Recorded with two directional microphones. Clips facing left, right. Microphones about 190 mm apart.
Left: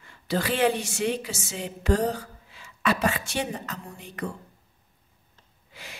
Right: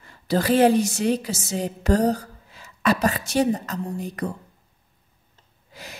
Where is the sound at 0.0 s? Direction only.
40° right (ahead or behind).